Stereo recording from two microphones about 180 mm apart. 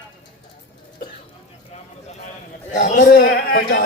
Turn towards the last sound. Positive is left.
turn(degrees=60)  # may be behind; listen again after turning